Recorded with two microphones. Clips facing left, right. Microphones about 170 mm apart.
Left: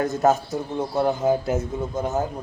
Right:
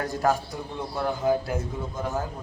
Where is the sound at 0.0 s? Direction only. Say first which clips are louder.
Left 5 dB; 20° left (ahead or behind).